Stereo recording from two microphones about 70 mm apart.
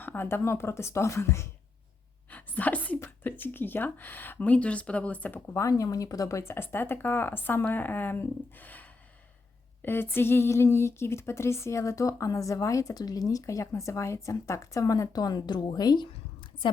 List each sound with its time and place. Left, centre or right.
0.0 s speech: left
2.3 s sneeze: left
3.2 s speech: left
5.5 s speech: left